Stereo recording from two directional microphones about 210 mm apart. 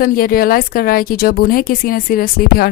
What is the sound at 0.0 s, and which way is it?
A woman's voice, 45° left (ahead or behind).